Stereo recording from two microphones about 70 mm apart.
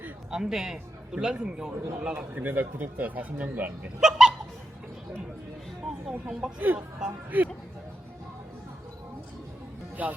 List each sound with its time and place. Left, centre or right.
0.3 s a man's voice: centre
2.3 s speech: right
4.0 s a sound: centre
6.1 s a man's voice: centre
6.6 s speech: right